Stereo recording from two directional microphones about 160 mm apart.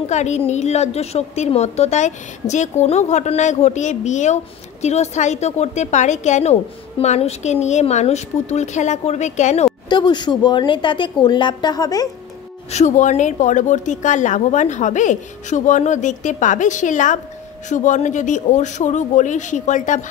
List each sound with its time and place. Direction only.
0.1 s a woman's voice: 45° left (ahead or behind)
9.8 s a woman's voice: 30° left (ahead or behind)
12.7 s a woman's voice: 50° left (ahead or behind)